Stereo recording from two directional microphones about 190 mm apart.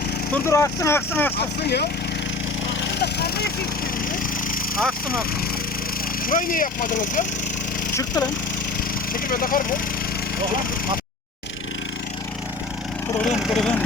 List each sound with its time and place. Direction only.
0.4 s speech: 15° left (ahead or behind)
1.6 s speech: 60° left (ahead or behind)
3.0 s a sound: 55° left (ahead or behind)
6.2 s speech: 45° left (ahead or behind)
9.1 s speech: 50° left (ahead or behind)
13.2 s speech: centre (ahead or behind)